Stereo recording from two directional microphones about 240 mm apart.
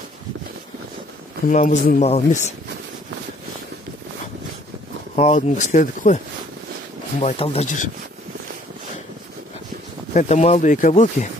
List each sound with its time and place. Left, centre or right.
1.5 s speech: left
5.1 s speech: left
7.2 s speech: left
10.1 s speech: left